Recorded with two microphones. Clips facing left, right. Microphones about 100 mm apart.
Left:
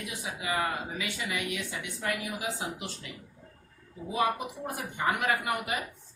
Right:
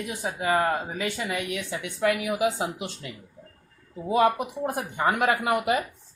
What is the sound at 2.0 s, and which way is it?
Speech, 75° right (ahead or behind).